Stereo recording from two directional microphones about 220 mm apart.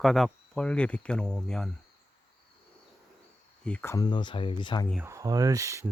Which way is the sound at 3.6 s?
5° left (ahead or behind).